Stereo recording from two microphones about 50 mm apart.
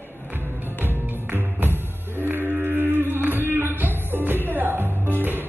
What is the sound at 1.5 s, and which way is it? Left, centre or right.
Singing, right.